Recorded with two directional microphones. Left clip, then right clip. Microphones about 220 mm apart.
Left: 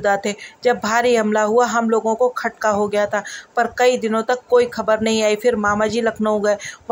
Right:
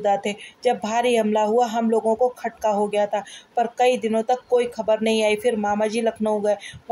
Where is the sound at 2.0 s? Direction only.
25° left (ahead or behind).